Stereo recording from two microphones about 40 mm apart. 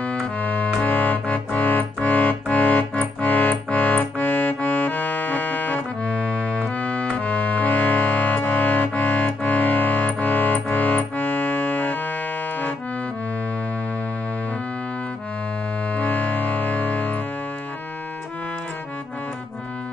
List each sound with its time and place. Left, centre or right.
0.0 s music: left
15.9 s music: left